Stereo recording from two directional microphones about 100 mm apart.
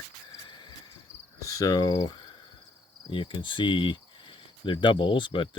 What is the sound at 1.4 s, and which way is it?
Speech, 35° left (ahead or behind).